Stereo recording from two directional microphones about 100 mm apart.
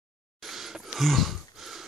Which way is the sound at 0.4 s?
5° right (ahead or behind).